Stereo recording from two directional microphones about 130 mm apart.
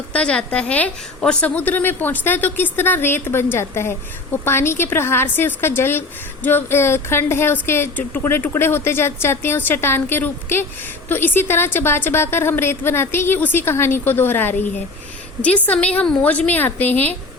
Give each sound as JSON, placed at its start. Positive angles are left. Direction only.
{"t": 0.1, "sound": "a woman's voice", "side_deg": 10}